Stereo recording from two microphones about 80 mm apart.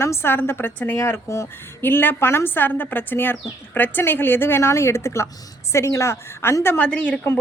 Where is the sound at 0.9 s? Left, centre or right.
Left.